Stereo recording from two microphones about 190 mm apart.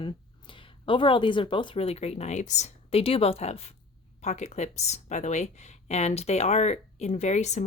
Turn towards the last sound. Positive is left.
turn(degrees=35)  # may be behind; listen again after turning